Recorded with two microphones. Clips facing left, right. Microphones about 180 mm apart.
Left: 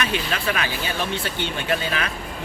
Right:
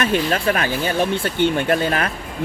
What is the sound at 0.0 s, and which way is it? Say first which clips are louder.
Speech: right 6 dB; 50° right (ahead or behind).